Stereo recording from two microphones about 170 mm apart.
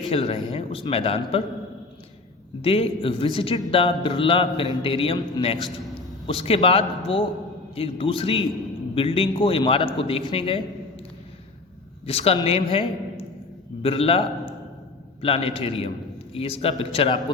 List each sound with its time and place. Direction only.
0.1 s a man's voice: 35° left (ahead or behind)
2.6 s a man's voice: 35° left (ahead or behind)
12.0 s a man's voice: 35° left (ahead or behind)